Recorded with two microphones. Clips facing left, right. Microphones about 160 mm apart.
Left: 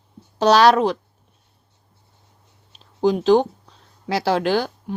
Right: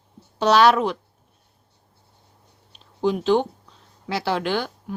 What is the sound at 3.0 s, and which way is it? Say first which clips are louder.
A woman's voice: left 4 dB; 35° left (ahead or behind).